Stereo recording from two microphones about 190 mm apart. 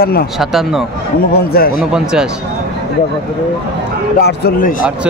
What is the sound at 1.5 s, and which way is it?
Speech, 50° left (ahead or behind).